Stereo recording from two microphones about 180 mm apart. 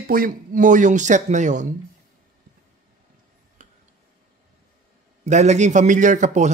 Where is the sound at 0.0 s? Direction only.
50° right (ahead or behind).